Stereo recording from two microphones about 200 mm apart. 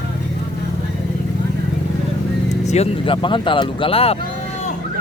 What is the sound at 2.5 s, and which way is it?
Speech, 35° left (ahead or behind).